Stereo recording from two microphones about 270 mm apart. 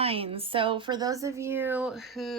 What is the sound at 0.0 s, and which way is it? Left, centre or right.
Speech, right.